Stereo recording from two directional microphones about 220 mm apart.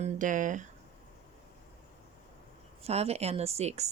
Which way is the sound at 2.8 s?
30° right (ahead or behind).